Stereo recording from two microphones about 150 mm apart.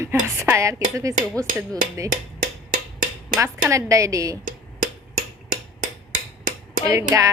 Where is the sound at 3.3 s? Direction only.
15° right (ahead or behind).